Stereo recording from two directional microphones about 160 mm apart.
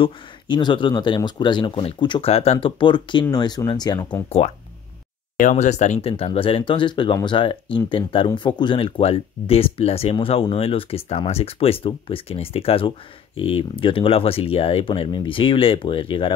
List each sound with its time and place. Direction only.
0.0 s speech: 30° left (ahead or behind)
5.4 s speech: 50° left (ahead or behind); by 16.3 s 30° left (ahead or behind)